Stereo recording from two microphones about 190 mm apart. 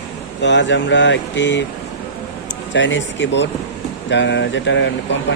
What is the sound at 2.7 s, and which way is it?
Speech, 70° left (ahead or behind).